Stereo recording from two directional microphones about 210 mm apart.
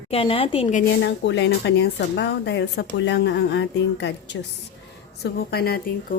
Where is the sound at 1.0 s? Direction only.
55° left (ahead or behind).